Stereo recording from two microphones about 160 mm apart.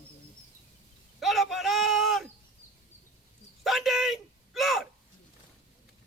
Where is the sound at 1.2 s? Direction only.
Centre (ahead or behind).